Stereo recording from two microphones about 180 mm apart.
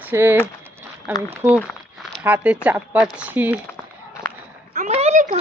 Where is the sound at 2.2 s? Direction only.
10° right (ahead or behind).